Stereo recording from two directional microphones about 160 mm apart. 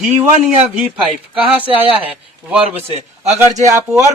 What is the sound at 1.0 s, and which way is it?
Speech, 5° right (ahead or behind).